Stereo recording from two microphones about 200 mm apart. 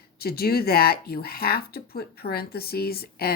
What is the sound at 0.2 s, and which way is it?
A woman's voice, 50° left (ahead or behind).